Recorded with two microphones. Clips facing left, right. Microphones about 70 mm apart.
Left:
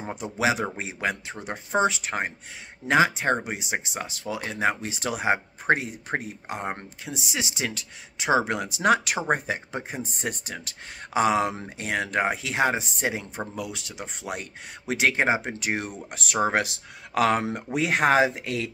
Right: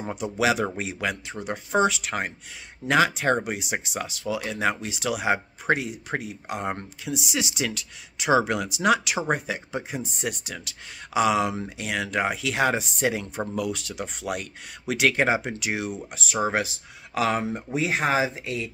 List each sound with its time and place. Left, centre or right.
0.1 s speech: left
16.1 s speech: left